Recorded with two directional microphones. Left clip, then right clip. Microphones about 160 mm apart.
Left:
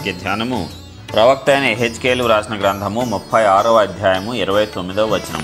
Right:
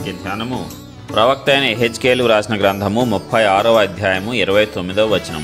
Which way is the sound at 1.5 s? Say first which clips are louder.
Even; 45° right (ahead or behind).